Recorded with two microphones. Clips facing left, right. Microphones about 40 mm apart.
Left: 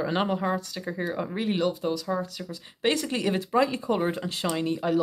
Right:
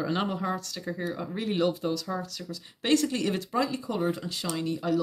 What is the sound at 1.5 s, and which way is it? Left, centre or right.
Speech, centre.